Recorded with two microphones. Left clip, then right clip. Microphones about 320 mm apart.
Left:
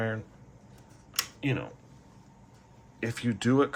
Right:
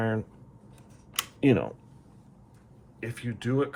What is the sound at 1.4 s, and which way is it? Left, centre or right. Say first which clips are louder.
Speech: right 13 dB; centre.